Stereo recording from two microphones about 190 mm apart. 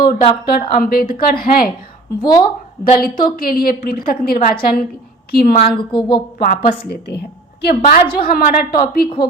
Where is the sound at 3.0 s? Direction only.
50° left (ahead or behind).